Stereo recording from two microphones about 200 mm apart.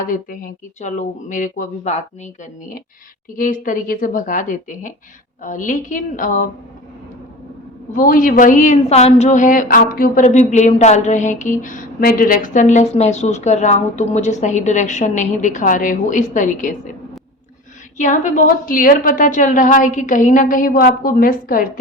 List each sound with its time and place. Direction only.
0.0 s a woman's voice: 45° left (ahead or behind)
7.9 s a woman's voice: 45° left (ahead or behind)
17.9 s a woman's voice: 40° left (ahead or behind)